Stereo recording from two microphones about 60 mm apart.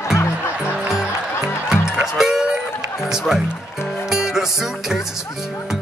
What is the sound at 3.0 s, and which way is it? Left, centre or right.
Music, centre.